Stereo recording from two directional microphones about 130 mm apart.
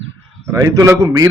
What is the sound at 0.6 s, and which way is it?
Speech, 25° right (ahead or behind).